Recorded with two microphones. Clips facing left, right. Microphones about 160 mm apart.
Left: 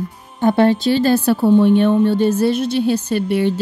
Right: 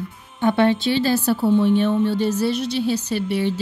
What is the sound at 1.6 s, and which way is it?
A woman's voice, 55° left (ahead or behind).